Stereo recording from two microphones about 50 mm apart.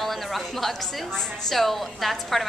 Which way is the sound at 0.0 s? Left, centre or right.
Centre.